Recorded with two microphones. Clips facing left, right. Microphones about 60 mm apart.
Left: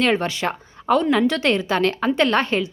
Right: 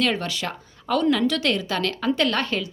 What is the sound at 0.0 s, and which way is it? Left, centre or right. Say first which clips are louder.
A woman's voice: left 4 dB; left.